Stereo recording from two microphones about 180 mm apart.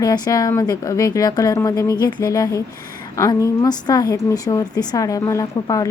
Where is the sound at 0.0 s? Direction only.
20° left (ahead or behind).